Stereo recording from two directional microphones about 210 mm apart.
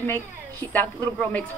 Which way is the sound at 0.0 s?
10° left (ahead or behind).